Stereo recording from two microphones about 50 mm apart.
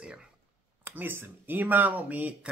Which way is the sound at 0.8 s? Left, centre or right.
Right.